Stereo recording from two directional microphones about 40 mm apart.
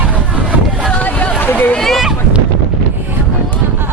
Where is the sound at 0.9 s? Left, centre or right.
Left.